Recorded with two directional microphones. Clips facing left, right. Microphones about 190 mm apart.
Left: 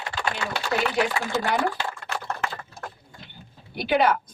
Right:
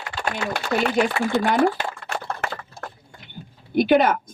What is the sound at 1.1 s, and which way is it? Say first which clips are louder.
Speech: right 5 dB; 60° right (ahead or behind).